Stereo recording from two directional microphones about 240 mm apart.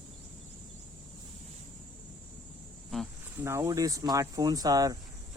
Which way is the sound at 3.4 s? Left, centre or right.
Centre.